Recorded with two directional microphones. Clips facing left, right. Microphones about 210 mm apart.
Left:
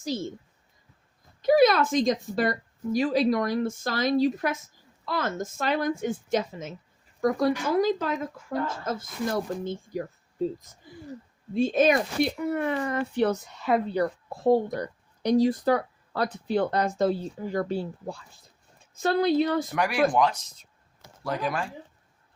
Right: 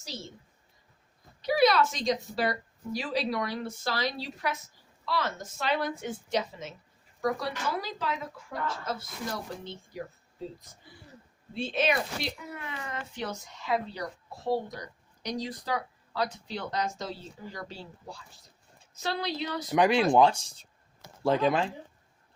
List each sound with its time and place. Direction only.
1.4 s speech: 50° left (ahead or behind)
11.5 s speech: 45° left (ahead or behind)
19.7 s speech: 20° right (ahead or behind)